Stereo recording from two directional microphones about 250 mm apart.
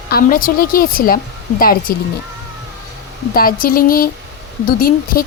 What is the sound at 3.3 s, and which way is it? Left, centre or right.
A woman's voice, left.